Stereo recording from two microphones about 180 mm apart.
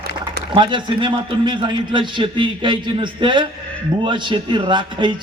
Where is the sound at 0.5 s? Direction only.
25° right (ahead or behind).